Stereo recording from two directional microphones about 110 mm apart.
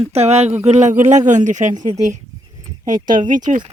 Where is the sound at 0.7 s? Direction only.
90° right.